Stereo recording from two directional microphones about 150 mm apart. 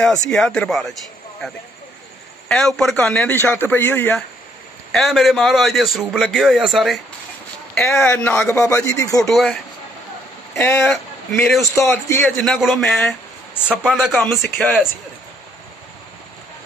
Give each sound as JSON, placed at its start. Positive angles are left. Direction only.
{"t": 0.0, "sound": "a man's voice", "side_deg": 5}
{"t": 2.4, "sound": "a man's voice", "side_deg": 5}
{"t": 4.9, "sound": "a man's voice", "side_deg": 0}
{"t": 8.1, "sound": "a man's voice", "side_deg": 15}
{"t": 9.2, "sound": "a man's voice", "side_deg": 0}
{"t": 10.5, "sound": "a man's voice", "side_deg": 15}
{"t": 11.7, "sound": "a man's voice", "side_deg": 20}
{"t": 12.3, "sound": "a man's voice", "side_deg": 0}